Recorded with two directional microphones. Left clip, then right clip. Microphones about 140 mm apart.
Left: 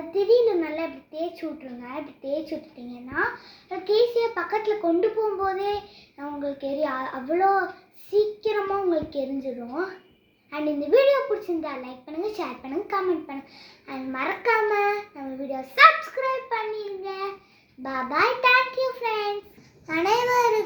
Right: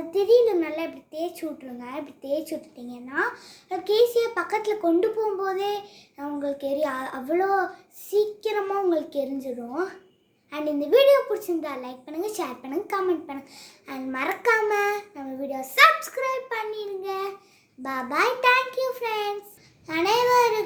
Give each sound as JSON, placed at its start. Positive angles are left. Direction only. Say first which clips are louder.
{"t": 0.1, "sound": "child singing", "louder": "right 1 dB", "side_deg": -15}
{"t": 3.7, "sound": "child singing", "louder": "right 1 dB", "side_deg": -15}
{"t": 19.9, "sound": "a child's voice", "louder": "right 1 dB", "side_deg": 0}